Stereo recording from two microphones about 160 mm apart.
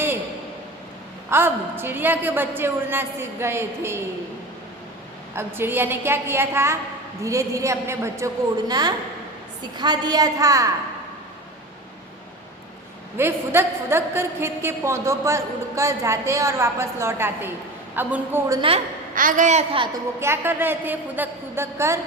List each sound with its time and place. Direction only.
1.3 s a woman's voice: 15° right (ahead or behind)
5.3 s a woman's voice: 15° right (ahead or behind)
13.1 s a woman's voice: 15° right (ahead or behind)
19.1 s a woman's voice: 55° right (ahead or behind)
19.7 s a woman's voice: 30° right (ahead or behind)
20.1 s a woman's voice: 15° right (ahead or behind)